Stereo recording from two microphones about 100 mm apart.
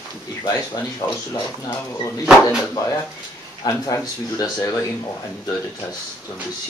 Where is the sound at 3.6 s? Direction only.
35° left (ahead or behind).